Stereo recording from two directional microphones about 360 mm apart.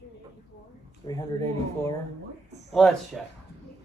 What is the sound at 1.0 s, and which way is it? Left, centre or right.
Speech, centre.